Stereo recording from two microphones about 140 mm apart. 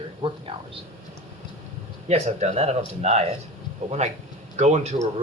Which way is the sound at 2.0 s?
50° right (ahead or behind).